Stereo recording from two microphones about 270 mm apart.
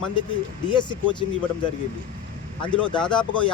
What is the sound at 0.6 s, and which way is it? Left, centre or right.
Speech, centre.